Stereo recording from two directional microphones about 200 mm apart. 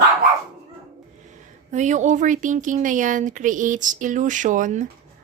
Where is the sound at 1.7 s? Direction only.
35° right (ahead or behind).